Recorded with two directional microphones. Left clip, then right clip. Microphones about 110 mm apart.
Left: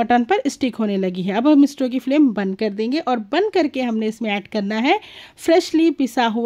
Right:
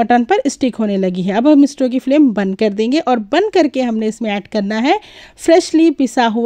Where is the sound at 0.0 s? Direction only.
35° right (ahead or behind).